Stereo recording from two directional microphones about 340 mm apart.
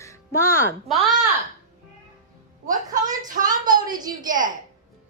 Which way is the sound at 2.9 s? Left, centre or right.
Right.